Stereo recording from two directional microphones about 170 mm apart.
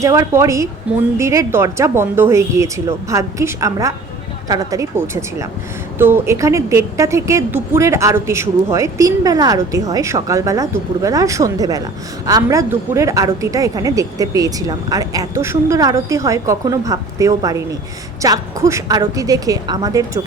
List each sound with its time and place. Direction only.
0.0 s a woman's voice: 20° right (ahead or behind)